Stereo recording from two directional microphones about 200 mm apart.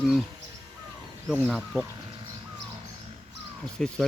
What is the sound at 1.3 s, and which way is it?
Speech, 5° right (ahead or behind).